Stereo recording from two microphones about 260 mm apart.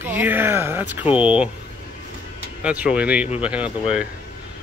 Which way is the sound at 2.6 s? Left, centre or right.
Centre.